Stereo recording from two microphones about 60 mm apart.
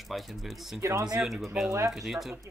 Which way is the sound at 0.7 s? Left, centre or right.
Right.